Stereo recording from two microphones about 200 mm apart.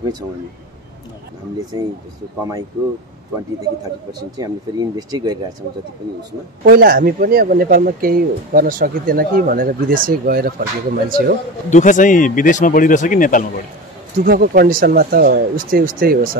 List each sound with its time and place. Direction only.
4.4 s speech: 20° right (ahead or behind)
6.6 s speech: 50° right (ahead or behind)
11.7 s speech: 40° left (ahead or behind)
14.1 s speech: 45° right (ahead or behind)